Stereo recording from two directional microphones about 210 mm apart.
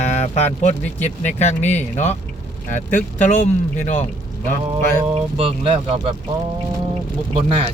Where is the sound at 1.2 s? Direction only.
35° left (ahead or behind).